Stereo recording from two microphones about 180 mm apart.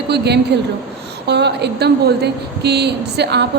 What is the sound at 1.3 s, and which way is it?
A woman's voice, 70° right (ahead or behind).